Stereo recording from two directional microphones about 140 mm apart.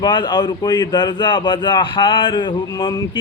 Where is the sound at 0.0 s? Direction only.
30° left (ahead or behind).